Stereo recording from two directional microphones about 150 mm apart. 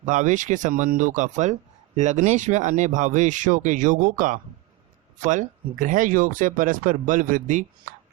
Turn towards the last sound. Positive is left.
turn(degrees=-60)  # may be behind; listen again after turning